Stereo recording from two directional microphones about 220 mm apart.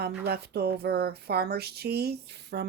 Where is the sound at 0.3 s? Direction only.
45° right (ahead or behind).